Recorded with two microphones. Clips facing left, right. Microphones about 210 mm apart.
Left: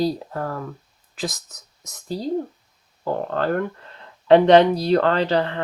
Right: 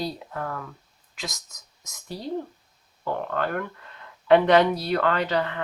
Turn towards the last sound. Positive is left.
turn(degrees=30)  # may be behind; listen again after turning